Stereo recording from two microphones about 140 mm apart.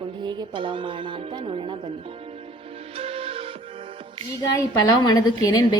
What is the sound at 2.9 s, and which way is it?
Music, 40° right (ahead or behind).